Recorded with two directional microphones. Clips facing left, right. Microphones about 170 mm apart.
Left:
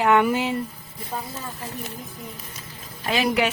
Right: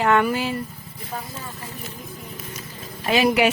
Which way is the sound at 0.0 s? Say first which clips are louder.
Left 1 dB; 15° left (ahead or behind).